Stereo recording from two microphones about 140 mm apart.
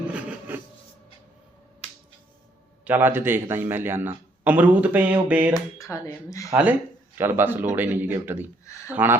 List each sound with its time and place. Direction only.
0.1 s a sound: 10° right (ahead or behind)
2.8 s a man's voice: 15° right (ahead or behind)
5.5 s speech: 25° left (ahead or behind)
6.5 s a man's voice: 10° right (ahead or behind)